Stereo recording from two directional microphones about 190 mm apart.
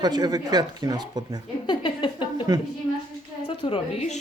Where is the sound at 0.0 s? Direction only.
20° right (ahead or behind).